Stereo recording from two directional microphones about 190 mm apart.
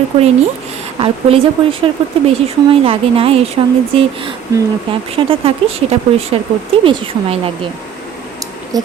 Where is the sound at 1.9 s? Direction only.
25° right (ahead or behind).